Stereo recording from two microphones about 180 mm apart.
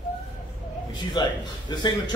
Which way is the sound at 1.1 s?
25° left (ahead or behind).